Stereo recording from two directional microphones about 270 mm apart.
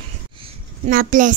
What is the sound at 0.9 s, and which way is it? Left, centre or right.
Speech, right.